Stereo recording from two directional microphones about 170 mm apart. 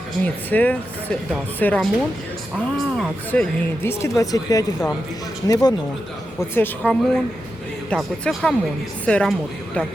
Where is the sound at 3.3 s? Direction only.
10° left (ahead or behind).